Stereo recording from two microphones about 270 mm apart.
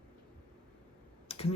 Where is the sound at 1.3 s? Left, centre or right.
Left.